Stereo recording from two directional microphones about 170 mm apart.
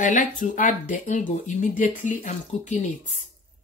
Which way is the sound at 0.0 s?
50° left (ahead or behind).